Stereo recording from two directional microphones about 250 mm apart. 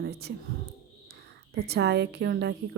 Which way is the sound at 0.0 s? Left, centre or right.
Right.